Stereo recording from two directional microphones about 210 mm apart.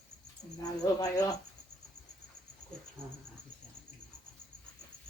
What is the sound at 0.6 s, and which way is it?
Speech, 20° left (ahead or behind).